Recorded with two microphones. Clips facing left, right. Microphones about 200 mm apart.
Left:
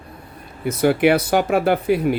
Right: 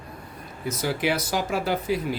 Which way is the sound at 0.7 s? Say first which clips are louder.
Left 10 dB; 60° left (ahead or behind).